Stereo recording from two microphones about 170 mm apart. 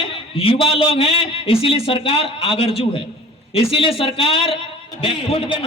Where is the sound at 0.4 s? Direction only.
35° left (ahead or behind).